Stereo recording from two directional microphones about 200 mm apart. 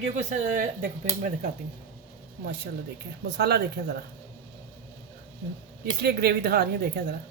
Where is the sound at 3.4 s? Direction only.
50° right (ahead or behind).